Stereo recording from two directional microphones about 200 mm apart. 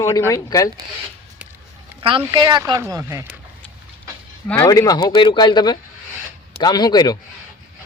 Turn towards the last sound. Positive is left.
turn(degrees=20)  # may be behind; listen again after turning